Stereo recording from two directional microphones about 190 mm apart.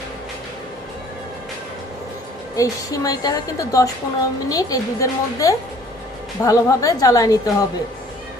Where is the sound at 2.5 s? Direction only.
15° left (ahead or behind).